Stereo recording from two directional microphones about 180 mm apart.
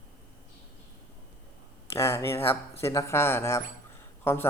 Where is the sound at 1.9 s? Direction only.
15° left (ahead or behind).